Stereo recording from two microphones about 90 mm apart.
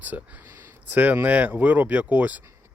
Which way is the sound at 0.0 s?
20° right (ahead or behind).